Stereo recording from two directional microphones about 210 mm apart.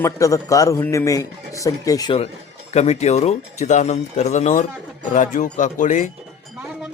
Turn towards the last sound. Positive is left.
turn(degrees=35)  # may be behind; listen again after turning